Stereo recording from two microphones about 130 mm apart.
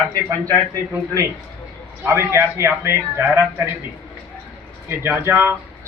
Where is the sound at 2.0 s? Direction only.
20° right (ahead or behind).